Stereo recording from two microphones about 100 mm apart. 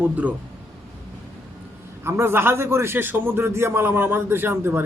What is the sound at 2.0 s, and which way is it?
A man's voice, 25° right (ahead or behind).